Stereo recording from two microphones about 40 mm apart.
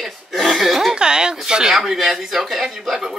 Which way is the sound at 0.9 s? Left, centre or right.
Centre.